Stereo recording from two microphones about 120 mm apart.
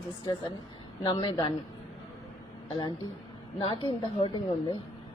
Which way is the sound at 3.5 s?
45° left (ahead or behind).